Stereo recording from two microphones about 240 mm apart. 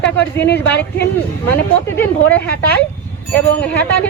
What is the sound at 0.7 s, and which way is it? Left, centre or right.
Speech, centre.